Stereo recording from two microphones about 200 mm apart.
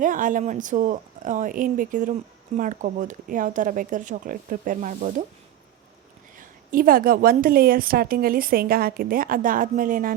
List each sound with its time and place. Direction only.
0.0 s speech: 40° right (ahead or behind)
6.3 s a woman's voice: 45° right (ahead or behind)